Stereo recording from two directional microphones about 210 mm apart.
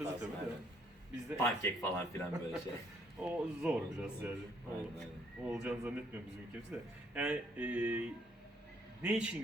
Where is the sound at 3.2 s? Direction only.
5° right (ahead or behind).